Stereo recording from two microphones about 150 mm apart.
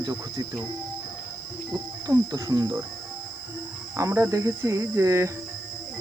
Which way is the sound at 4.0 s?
20° right (ahead or behind).